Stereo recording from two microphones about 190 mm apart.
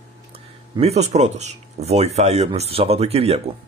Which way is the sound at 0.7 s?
35° right (ahead or behind).